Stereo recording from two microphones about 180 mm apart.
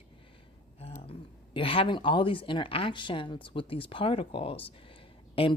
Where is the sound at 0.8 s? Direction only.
30° left (ahead or behind).